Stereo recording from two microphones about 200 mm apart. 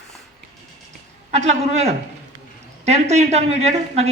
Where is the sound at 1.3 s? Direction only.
35° right (ahead or behind).